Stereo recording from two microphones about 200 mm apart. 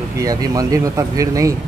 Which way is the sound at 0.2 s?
15° right (ahead or behind).